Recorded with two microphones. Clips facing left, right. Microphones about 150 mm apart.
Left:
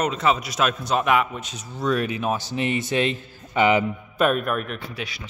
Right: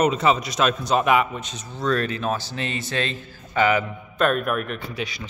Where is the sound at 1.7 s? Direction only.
10° left (ahead or behind).